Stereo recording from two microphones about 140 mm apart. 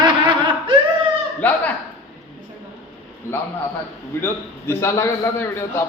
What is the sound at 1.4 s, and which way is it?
Speech, 10° left (ahead or behind).